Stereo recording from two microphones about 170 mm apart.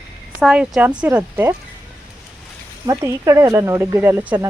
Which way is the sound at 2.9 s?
20° right (ahead or behind).